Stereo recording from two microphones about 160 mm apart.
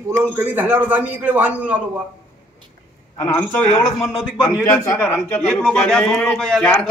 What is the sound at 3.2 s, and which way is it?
Speech, 10° left (ahead or behind).